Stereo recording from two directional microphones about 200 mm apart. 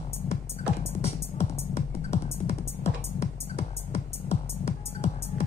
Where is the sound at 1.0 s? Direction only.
30° left (ahead or behind).